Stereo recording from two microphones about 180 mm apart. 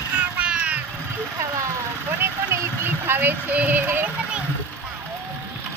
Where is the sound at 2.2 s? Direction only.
15° right (ahead or behind).